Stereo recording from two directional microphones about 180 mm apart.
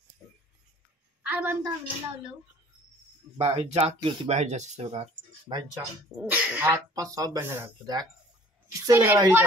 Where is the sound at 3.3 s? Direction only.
35° right (ahead or behind).